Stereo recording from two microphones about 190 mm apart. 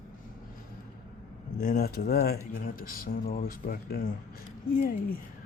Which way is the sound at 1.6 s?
45° left (ahead or behind).